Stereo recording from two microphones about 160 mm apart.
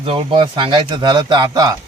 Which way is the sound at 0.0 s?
35° right (ahead or behind).